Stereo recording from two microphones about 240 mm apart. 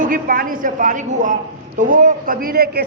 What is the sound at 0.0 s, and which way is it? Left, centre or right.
A woman's voice, right.